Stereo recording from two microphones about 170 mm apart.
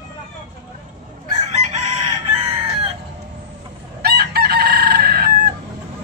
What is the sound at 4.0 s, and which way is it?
Chicken, 70° right (ahead or behind).